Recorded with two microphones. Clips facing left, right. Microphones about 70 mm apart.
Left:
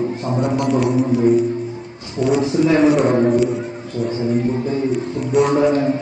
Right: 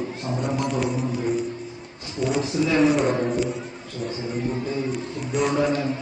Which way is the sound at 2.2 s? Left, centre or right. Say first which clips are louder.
Left 7 dB; centre.